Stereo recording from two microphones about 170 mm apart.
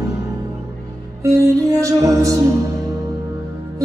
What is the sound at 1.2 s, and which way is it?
Music, 20° right (ahead or behind).